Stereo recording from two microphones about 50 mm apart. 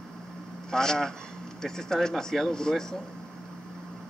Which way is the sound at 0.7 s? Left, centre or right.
Centre.